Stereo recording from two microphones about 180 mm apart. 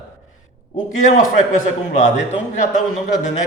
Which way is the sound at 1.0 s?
45° left (ahead or behind).